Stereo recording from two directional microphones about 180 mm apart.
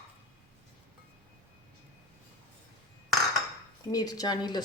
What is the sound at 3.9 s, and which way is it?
Speech, 20° left (ahead or behind).